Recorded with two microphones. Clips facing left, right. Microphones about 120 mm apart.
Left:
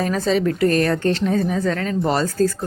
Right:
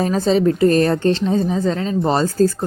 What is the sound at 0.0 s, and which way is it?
Speech, 30° right (ahead or behind).